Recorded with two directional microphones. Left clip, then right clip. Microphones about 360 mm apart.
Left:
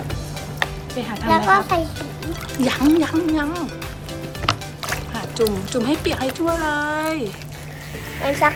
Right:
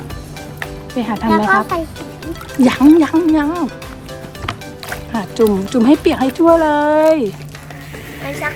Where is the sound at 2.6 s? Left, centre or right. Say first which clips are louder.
Right 7 dB; centre.